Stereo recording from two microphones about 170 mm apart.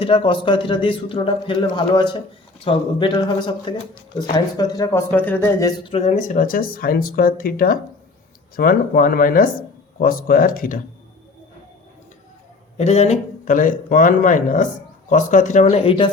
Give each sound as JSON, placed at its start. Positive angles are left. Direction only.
{"t": 0.0, "sound": "a man's voice", "side_deg": 30}
{"t": 5.9, "sound": "speech", "side_deg": 40}
{"t": 12.7, "sound": "speech", "side_deg": 40}